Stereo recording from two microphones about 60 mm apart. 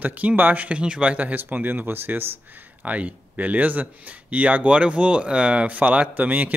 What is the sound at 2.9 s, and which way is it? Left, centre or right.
Speech, right.